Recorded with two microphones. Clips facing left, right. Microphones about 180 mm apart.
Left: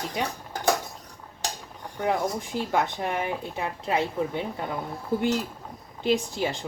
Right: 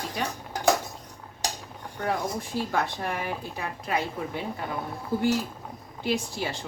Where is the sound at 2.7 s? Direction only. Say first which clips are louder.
Left 5 dB; 20° left (ahead or behind).